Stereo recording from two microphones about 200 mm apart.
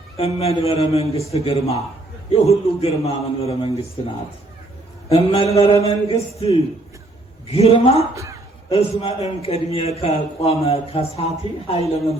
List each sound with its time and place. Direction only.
0.2 s a man's voice: 30° left (ahead or behind)
5.0 s a man's voice: 30° left (ahead or behind)
8.1 s a man's voice: 15° right (ahead or behind)
8.7 s a man's voice: 30° left (ahead or behind)